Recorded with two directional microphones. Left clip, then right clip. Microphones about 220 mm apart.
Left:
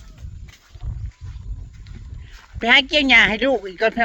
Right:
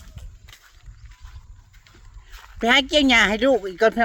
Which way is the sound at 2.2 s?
5° right (ahead or behind).